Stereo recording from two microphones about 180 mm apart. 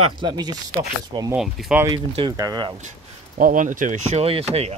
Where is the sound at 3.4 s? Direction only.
45° right (ahead or behind).